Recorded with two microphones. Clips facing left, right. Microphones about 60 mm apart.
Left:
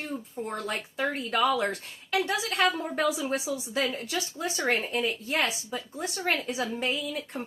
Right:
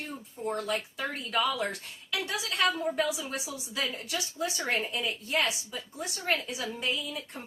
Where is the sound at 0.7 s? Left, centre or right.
Left.